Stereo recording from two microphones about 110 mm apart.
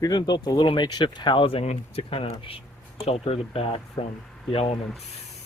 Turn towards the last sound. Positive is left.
turn(degrees=60)  # may be behind; listen again after turning